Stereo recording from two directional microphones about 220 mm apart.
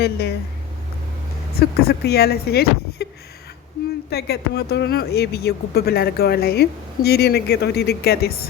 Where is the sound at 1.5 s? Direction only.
45° left (ahead or behind).